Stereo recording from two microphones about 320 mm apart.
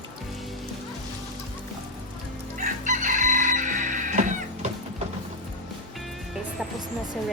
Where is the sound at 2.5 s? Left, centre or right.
Right.